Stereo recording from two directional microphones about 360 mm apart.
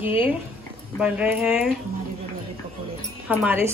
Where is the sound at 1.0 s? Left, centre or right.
Centre.